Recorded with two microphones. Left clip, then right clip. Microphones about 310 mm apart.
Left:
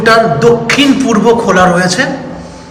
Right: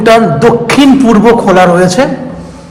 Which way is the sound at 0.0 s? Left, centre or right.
Centre.